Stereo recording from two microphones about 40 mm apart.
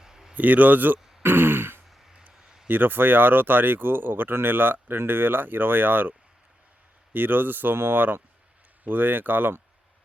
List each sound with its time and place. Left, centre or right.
0.0 s a sound: centre
0.3 s speech: right
1.2 s throat clearing: right
2.0 s vehicle: centre
2.6 s speech: right